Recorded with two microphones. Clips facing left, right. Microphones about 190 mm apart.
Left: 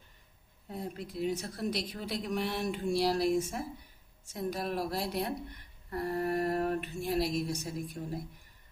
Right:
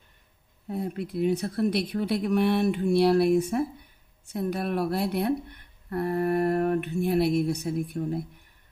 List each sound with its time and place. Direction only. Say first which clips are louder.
0.7 s speech: right 8 dB; 60° right (ahead or behind)